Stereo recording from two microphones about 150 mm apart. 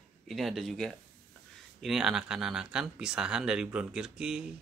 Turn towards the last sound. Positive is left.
turn(degrees=-5)  # may be behind; listen again after turning